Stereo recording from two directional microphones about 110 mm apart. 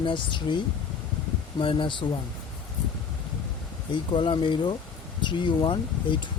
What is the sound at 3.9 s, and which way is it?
Speech, 45° left (ahead or behind).